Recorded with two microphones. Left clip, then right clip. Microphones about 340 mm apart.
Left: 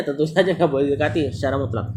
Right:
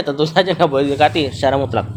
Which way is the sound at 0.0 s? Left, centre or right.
Right.